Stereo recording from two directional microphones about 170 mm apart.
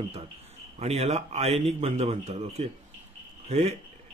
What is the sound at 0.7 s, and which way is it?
Speech, 40° right (ahead or behind).